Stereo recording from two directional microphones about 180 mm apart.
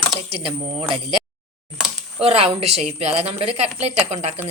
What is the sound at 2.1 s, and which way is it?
Speech, 35° right (ahead or behind).